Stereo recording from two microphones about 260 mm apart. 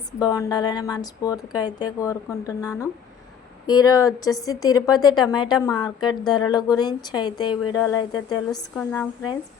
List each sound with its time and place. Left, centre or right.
0.2 s speech: centre
3.7 s speech: centre